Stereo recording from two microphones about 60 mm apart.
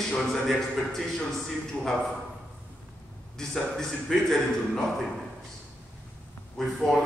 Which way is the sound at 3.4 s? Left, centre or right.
Centre.